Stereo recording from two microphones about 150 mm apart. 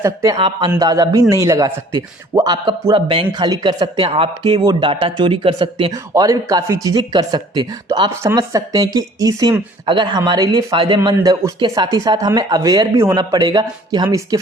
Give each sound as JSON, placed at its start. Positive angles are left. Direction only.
{"t": 0.0, "sound": "speech", "side_deg": -20}
{"t": 0.3, "sound": "speech", "side_deg": -35}